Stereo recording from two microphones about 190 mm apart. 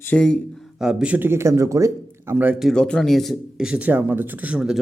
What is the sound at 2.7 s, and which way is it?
Speech, 5° left (ahead or behind).